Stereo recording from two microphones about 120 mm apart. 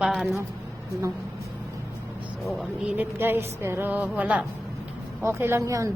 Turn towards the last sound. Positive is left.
turn(degrees=-25)  # may be behind; listen again after turning